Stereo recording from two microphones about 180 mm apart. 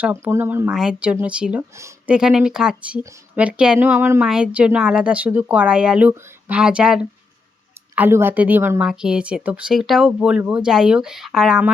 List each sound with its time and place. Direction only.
0.0 s a woman's voice: 10° right (ahead or behind)
1.7 s speech: 15° right (ahead or behind)
2.1 s a woman's voice: 5° right (ahead or behind)